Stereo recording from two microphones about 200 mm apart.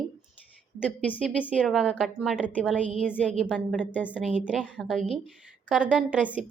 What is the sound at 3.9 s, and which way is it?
A woman's voice, 10° left (ahead or behind).